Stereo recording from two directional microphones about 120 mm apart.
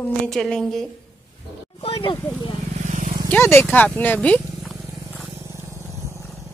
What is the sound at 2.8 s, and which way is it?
Vehicle, 90° right.